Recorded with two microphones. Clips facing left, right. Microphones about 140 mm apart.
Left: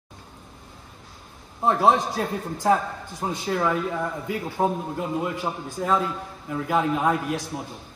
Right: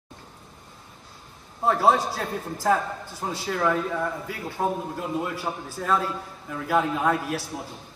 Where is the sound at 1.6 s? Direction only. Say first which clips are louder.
Left 1 dB; 20° left (ahead or behind).